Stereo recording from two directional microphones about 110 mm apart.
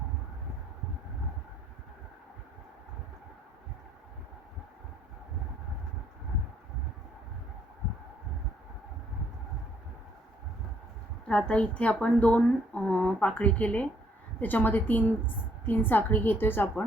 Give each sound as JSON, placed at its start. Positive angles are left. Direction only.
{"t": 11.3, "sound": "a woman's voice", "side_deg": 10}